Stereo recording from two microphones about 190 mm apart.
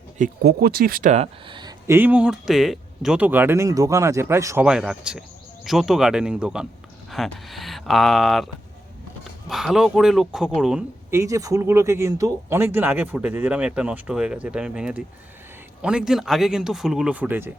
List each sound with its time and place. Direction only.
0.2 s speech: 55° right (ahead or behind); by 2.0 s 25° right (ahead or behind)
2.0 s speech: 10° right (ahead or behind)
4.6 s speech: 5° right (ahead or behind)
9.5 s speech: centre (ahead or behind)
11.1 s speech: 15° right (ahead or behind)